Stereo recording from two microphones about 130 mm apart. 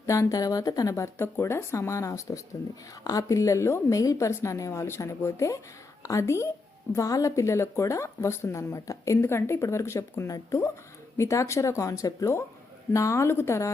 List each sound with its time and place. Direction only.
0.0 s speech: 25° left (ahead or behind)